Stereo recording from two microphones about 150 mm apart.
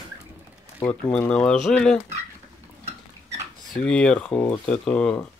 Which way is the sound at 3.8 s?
5° left (ahead or behind).